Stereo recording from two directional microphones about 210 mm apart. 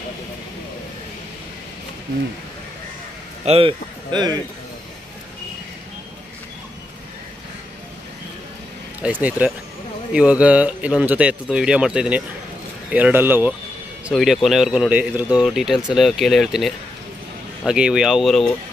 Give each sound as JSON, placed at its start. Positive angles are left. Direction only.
{"t": 3.4, "sound": "speech", "side_deg": -25}
{"t": 9.0, "sound": "speech", "side_deg": -5}